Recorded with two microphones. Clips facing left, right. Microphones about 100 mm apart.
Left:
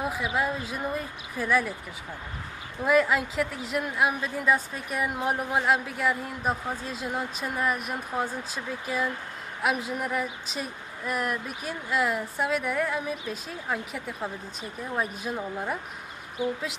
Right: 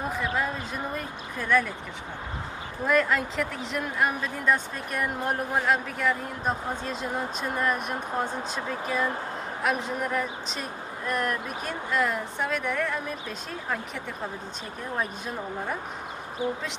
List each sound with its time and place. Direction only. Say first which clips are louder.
0.0 s speech: even; 5° left (ahead or behind)
2.8 s speech: left 1 dB; 5° left (ahead or behind)
16.4 s speech: even; 35° right (ahead or behind)